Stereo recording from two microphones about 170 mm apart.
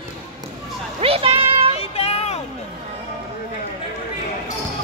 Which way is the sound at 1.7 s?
35° left (ahead or behind).